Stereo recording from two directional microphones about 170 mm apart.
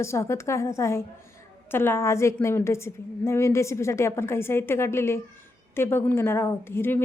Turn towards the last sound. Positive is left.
turn(degrees=15)  # may be behind; listen again after turning